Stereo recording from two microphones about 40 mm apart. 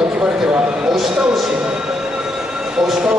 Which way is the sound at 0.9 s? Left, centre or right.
Centre.